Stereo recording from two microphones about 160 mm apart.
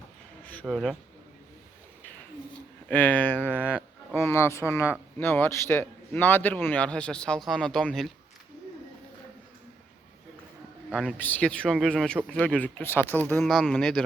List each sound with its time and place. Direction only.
0.7 s speech: centre (ahead or behind)
2.9 s a man's voice: 10° left (ahead or behind)
11.2 s a man's voice: 10° left (ahead or behind)